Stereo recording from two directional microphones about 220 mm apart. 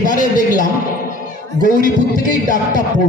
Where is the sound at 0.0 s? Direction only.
35° left (ahead or behind).